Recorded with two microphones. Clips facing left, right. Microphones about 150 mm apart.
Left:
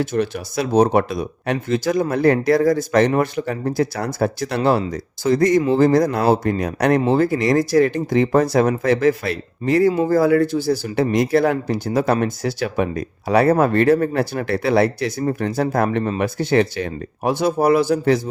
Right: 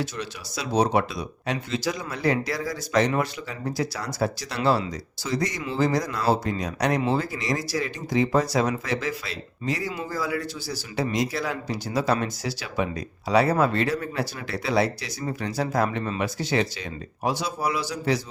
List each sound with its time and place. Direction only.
0.0 s speech: 50° left (ahead or behind)